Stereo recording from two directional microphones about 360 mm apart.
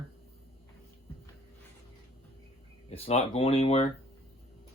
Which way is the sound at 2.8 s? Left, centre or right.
Centre.